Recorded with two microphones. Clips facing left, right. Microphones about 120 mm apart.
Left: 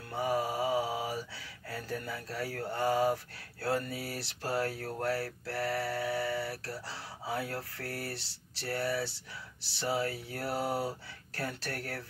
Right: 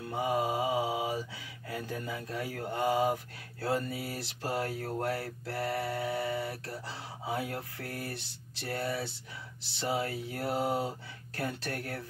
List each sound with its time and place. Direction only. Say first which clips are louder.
0.1 s mantra: right 1 dB; 20° right (ahead or behind)
3.6 s speech: right 1 dB; 20° right (ahead or behind)